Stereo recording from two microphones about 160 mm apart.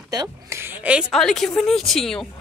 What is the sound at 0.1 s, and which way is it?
Speech, 20° right (ahead or behind).